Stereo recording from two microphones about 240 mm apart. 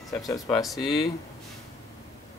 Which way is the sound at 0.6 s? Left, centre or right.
Centre.